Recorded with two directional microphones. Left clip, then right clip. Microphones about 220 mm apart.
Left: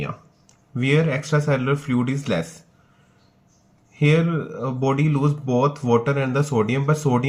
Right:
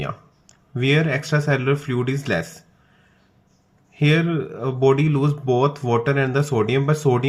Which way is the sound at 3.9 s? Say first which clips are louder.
Even; 45° right (ahead or behind).